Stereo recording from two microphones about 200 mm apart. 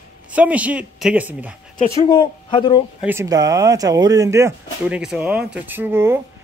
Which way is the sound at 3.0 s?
15° right (ahead or behind).